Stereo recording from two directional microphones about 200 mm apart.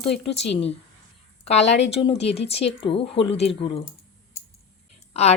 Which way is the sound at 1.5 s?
35° left (ahead or behind).